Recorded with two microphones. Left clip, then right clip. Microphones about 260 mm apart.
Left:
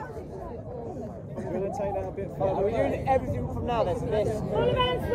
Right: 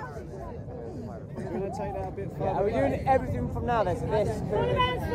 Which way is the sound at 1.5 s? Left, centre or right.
Centre.